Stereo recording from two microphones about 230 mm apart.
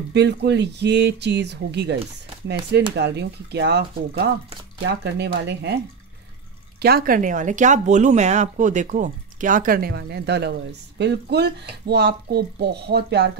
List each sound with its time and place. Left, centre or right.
0.1 s speech: right
3.0 s speech: right
6.8 s speech: right